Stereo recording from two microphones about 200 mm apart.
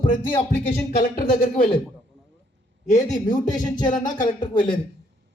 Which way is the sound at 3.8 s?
40° left (ahead or behind).